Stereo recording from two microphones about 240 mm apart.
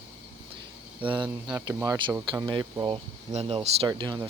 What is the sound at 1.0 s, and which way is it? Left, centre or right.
Speech, centre.